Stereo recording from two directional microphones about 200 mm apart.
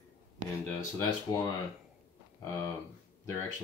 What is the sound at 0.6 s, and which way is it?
Speech, 15° left (ahead or behind).